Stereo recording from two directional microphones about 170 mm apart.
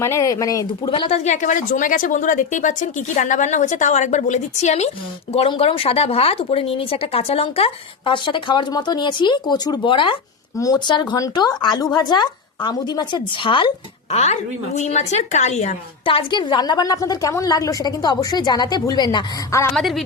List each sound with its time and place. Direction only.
0.0 s a woman's voice: 15° left (ahead or behind)
14.2 s a woman's voice: 40° left (ahead or behind); by 19.7 s 15° left (ahead or behind)
19.7 s a woman's voice: centre (ahead or behind)